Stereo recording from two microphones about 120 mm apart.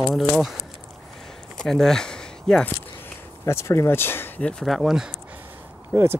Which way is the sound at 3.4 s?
25° left (ahead or behind).